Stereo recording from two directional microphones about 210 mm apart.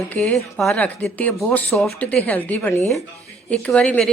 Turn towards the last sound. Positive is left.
turn(degrees=5)  # may be behind; listen again after turning